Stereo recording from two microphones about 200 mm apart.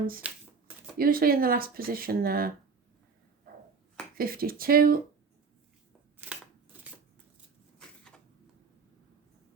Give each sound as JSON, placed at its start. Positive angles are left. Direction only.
{"t": 0.2, "sound": "speech", "side_deg": -5}
{"t": 0.9, "sound": "speech", "side_deg": -45}
{"t": 4.2, "sound": "speech", "side_deg": -45}
{"t": 7.8, "sound": "a sound", "side_deg": 5}